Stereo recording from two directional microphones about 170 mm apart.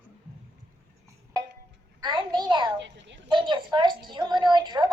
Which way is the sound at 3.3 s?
25° right (ahead or behind).